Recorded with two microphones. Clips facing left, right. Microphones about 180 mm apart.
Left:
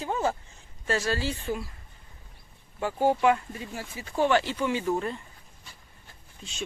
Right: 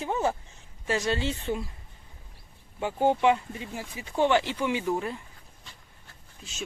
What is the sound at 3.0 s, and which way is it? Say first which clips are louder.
A woman's voice: even; 20° right (ahead or behind).